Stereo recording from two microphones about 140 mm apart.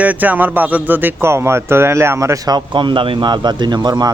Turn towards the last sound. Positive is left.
turn(degrees=-30)  # may be behind; listen again after turning